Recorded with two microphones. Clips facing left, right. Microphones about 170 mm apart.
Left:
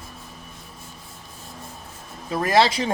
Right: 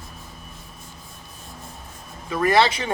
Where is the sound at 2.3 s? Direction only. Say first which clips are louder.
Even; 35° left (ahead or behind).